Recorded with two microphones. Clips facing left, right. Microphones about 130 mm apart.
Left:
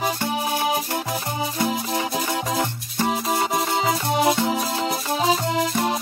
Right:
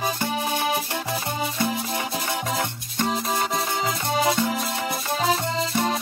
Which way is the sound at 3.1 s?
20° left (ahead or behind).